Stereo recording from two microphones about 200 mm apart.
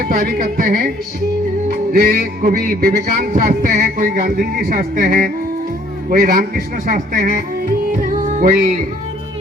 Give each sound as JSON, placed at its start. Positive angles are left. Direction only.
{"t": 0.0, "sound": "music", "side_deg": -45}